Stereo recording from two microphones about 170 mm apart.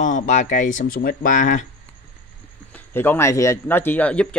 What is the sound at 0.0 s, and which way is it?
Speech, 45° left (ahead or behind).